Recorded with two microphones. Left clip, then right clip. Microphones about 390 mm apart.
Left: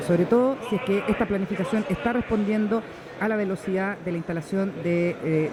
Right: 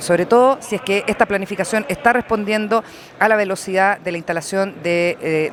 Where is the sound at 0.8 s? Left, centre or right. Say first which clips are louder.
Right 6 dB; right.